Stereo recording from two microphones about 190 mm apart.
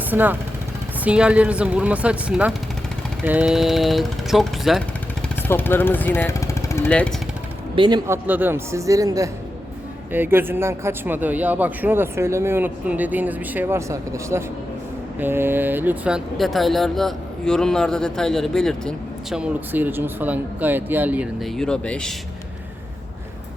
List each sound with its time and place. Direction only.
0.1 s a man's voice: 10° right (ahead or behind)
5.4 s speech: 10° left (ahead or behind)
7.8 s a man's voice: 25° right (ahead or behind); by 22.1 s 5° left (ahead or behind)